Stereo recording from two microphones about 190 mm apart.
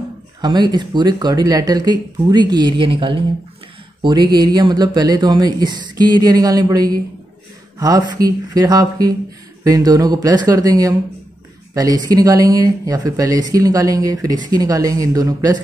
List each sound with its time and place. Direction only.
0.4 s speech: 20° right (ahead or behind)